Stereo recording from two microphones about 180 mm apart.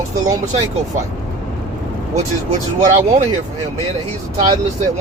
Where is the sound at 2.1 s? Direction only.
40° right (ahead or behind).